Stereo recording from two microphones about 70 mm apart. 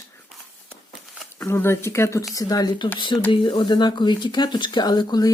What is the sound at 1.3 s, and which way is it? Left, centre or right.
Speech, left.